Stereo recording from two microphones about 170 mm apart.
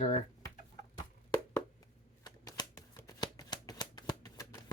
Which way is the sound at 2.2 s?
25° left (ahead or behind).